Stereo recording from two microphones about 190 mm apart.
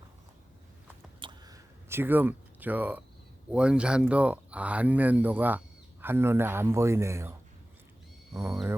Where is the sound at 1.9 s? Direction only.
10° right (ahead or behind).